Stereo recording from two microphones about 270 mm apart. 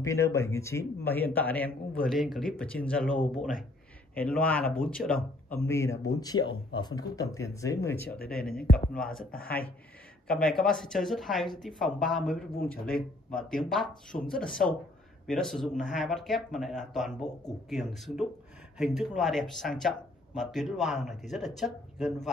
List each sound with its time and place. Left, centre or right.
0.0 s a man's voice: centre
8.7 s speech: left
9.0 s speech: centre